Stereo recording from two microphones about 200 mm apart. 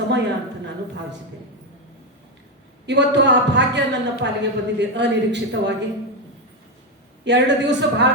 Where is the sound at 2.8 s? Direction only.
60° right (ahead or behind).